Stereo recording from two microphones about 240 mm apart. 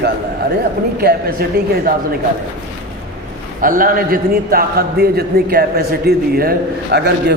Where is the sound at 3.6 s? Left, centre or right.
Right.